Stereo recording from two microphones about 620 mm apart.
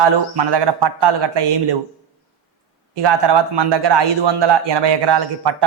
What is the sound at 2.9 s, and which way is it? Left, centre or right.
Speech, right.